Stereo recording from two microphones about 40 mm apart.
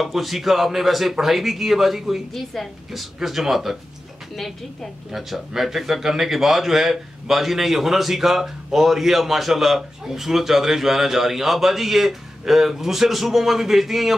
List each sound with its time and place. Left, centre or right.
0.0 s speech: centre
5.1 s a man's voice: centre